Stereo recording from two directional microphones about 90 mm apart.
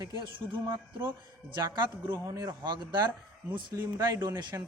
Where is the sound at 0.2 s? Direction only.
60° right (ahead or behind).